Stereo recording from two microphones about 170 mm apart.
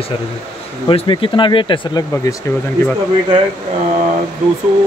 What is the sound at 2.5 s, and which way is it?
Speech, 15° left (ahead or behind).